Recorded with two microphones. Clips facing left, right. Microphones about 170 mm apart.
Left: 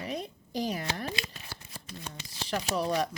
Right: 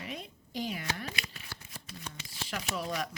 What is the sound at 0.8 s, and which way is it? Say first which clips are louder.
Shuffling cards: left 4 dB; 35° left (ahead or behind).